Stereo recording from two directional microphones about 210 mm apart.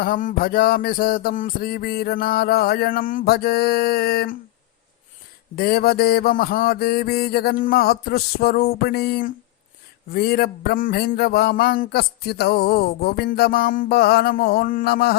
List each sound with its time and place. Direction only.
0.0 s speech: 40° left (ahead or behind)
5.5 s speech: 45° left (ahead or behind)